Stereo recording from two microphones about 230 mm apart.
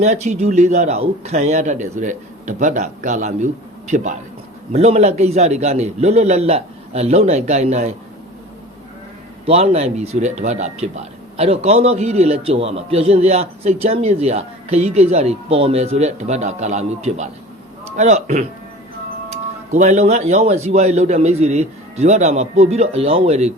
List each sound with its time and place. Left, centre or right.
0.0 s speech: right
9.5 s speech: right